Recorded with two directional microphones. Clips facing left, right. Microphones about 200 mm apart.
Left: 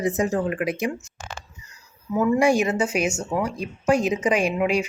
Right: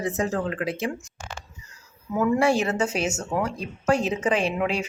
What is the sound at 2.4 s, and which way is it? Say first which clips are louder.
A woman's voice: left 2 dB; 10° left (ahead or behind).